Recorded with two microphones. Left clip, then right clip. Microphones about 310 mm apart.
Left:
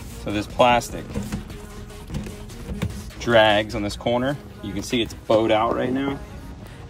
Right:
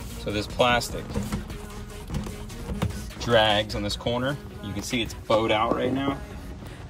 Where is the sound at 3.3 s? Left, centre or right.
Right.